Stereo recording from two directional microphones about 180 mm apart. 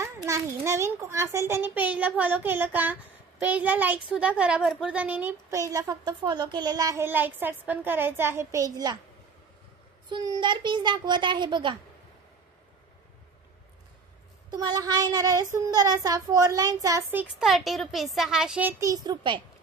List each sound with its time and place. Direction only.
0.0 s a child's voice: 15° right (ahead or behind)
10.0 s child singing: 20° right (ahead or behind)
14.5 s child singing: 20° right (ahead or behind)
17.2 s a child's voice: centre (ahead or behind); by 19.4 s 25° right (ahead or behind)